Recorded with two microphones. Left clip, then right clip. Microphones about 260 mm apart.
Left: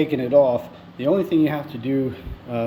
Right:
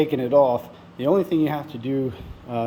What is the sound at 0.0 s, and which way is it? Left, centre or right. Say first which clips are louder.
A man's voice: left 1 dB; centre.